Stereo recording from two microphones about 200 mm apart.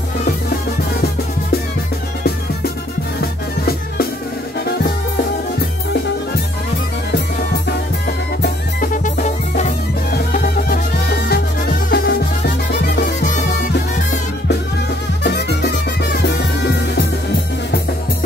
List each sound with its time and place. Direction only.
8.4 s music: 45° left (ahead or behind)
15.2 s music: 55° left (ahead or behind)